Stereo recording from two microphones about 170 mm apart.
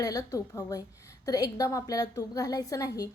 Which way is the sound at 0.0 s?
20° left (ahead or behind).